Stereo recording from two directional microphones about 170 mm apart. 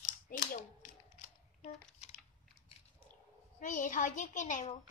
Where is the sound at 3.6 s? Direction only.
50° left (ahead or behind).